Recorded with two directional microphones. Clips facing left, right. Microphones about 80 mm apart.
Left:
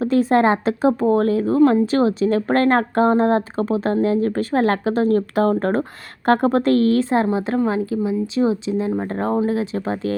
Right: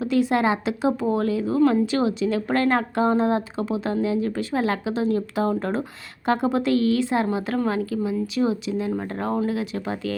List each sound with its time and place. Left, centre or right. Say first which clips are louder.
0.0 s speech: left 5 dB; left
7.3 s speech: left 4 dB; left